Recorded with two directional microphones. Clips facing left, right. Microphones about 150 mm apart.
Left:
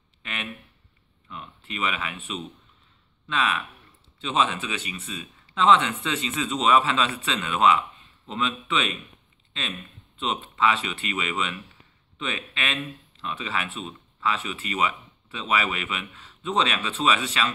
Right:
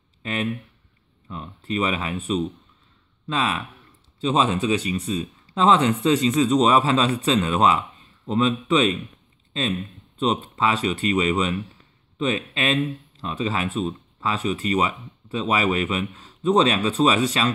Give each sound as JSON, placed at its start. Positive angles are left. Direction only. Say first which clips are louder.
{"t": 0.2, "sound": "a sound", "louder": "right 9 dB", "side_deg": -35}
{"t": 1.3, "sound": "speech", "louder": "right 9 dB", "side_deg": -35}
{"t": 10.1, "sound": "speech", "louder": "right 7 dB", "side_deg": -40}